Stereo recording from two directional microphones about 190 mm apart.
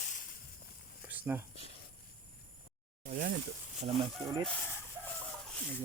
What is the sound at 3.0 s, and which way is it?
Speech, 45° right (ahead or behind).